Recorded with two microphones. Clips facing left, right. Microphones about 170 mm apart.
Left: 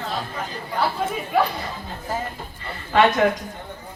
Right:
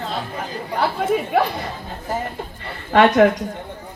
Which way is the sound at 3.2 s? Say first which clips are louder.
Right 5 dB; 60° right (ahead or behind).